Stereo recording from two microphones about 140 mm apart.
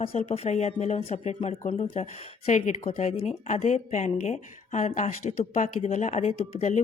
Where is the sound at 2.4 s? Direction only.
60° left (ahead or behind).